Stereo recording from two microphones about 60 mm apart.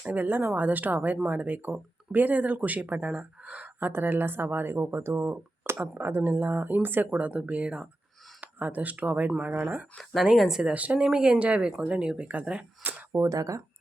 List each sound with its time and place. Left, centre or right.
0.0 s speech: right
3.8 s speech: right
5.7 s speech: right
6.0 s speech: right
10.3 s speech: centre
10.6 s speech: right
13.2 s speech: right